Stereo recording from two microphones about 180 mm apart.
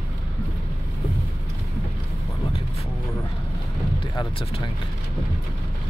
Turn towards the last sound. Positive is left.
turn(degrees=30)  # may be behind; listen again after turning